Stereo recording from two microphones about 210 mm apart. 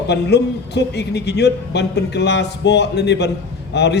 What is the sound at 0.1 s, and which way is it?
A man's voice, 50° left (ahead or behind).